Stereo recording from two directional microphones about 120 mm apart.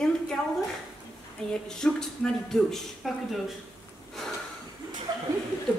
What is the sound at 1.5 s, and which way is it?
A man's voice, 5° left (ahead or behind).